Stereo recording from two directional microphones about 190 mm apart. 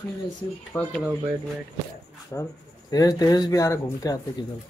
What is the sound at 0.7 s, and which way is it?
Speech, 10° left (ahead or behind).